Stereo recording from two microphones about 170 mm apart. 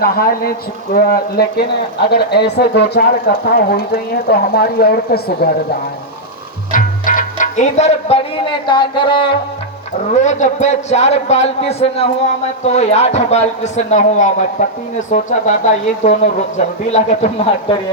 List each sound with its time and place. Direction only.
0.0 s speech: 60° left (ahead or behind)
6.7 s music: 50° left (ahead or behind); by 9.3 s 30° left (ahead or behind)
10.1 s a man's voice: 45° left (ahead or behind)